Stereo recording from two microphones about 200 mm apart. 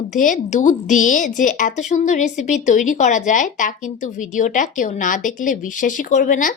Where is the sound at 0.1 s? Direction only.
40° left (ahead or behind).